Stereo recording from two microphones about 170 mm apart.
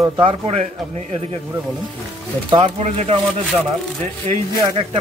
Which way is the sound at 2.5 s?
30° right (ahead or behind).